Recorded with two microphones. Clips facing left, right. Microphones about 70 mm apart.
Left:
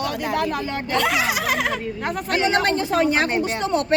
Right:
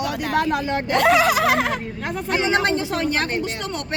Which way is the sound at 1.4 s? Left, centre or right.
Right.